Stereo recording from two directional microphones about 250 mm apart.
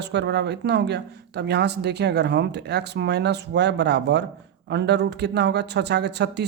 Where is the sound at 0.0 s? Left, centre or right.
Right.